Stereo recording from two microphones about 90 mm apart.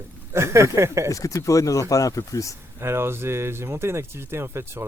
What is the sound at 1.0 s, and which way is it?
Speech, 35° left (ahead or behind).